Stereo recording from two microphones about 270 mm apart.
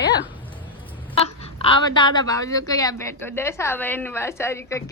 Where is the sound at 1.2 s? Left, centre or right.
Centre.